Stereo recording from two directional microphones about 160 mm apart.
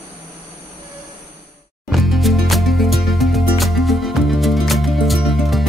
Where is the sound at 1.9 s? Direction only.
Centre (ahead or behind).